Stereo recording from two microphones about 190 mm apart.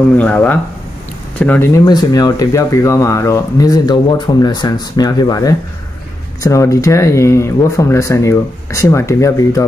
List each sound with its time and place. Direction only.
0.1 s speech: 10° left (ahead or behind)